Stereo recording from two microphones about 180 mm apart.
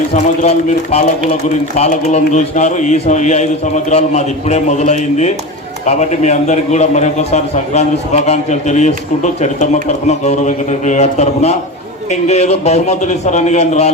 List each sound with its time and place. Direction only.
0.1 s a man's voice: 35° left (ahead or behind)